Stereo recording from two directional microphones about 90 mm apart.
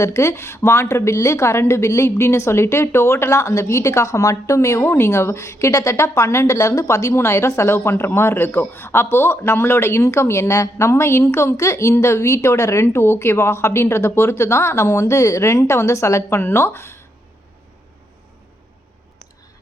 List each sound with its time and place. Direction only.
0.0 s a woman's voice: 35° left (ahead or behind)